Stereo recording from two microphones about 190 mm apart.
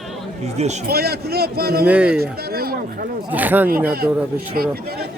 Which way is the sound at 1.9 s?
5° right (ahead or behind).